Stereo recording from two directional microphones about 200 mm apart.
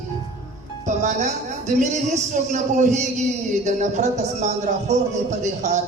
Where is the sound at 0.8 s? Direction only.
35° right (ahead or behind).